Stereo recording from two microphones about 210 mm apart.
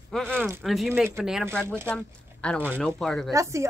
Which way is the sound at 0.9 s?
10° right (ahead or behind).